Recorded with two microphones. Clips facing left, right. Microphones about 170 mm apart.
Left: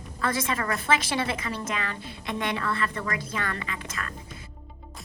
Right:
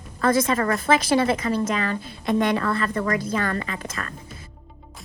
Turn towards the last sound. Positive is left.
turn(degrees=-40)  # may be behind; listen again after turning